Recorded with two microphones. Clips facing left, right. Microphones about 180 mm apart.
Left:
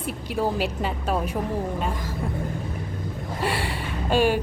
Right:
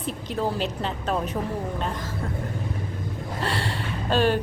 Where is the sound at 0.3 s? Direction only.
10° left (ahead or behind).